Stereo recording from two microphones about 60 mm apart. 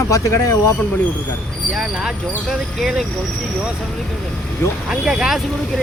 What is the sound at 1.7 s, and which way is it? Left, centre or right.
Speech, centre.